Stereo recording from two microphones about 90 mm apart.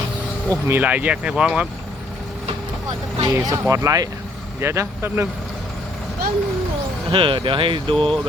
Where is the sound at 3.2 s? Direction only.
45° right (ahead or behind); by 5.3 s 25° right (ahead or behind).